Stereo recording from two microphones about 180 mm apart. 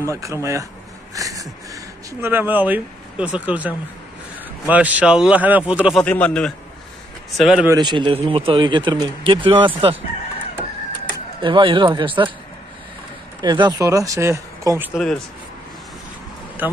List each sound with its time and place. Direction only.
0.1 s speech: 15° right (ahead or behind)
6.0 s a man's voice: 5° left (ahead or behind)
7.6 s speech: 20° right (ahead or behind)
11.4 s speech: 30° right (ahead or behind)
13.4 s speech: 20° right (ahead or behind)